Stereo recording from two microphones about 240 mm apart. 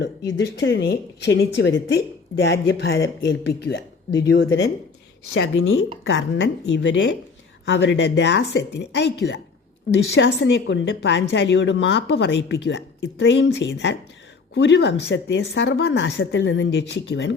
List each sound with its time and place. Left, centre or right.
0.3 s a woman's voice: left